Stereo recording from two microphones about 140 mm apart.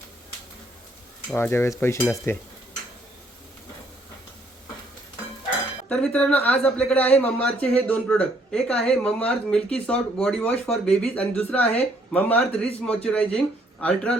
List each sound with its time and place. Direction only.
1.4 s speech: 15° left (ahead or behind)
5.9 s speech: 10° left (ahead or behind)